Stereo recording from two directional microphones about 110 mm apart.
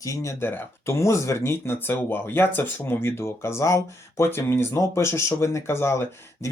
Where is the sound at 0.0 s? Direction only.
30° left (ahead or behind).